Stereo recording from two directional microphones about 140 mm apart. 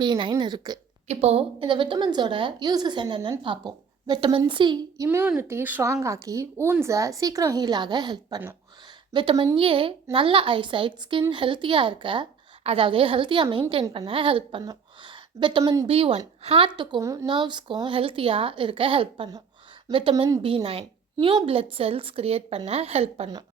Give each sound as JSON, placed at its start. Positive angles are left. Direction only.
{"t": 0.0, "sound": "a woman's voice", "side_deg": -30}
{"t": 1.0, "sound": "a woman's voice", "side_deg": -50}
{"t": 5.0, "sound": "a woman's voice", "side_deg": -15}
{"t": 17.0, "sound": "a woman's voice", "side_deg": -20}
{"t": 17.2, "sound": "a woman's voice", "side_deg": -35}